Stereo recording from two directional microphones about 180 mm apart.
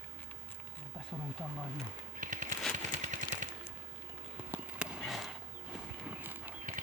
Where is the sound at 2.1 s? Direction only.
45° right (ahead or behind).